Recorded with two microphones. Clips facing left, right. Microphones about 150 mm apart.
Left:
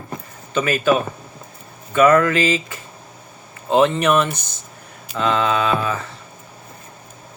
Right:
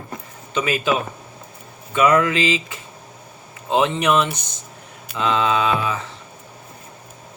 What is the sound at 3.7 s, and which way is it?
Speech, 15° right (ahead or behind).